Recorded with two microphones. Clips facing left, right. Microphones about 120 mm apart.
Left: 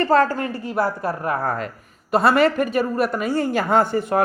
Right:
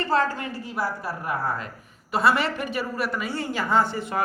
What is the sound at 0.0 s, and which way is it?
A woman's voice, 55° left (ahead or behind).